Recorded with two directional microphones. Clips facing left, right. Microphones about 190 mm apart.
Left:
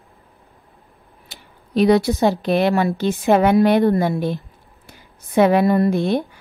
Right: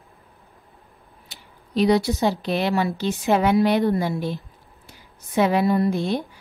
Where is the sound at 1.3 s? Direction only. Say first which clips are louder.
Left 4 dB; 55° left (ahead or behind).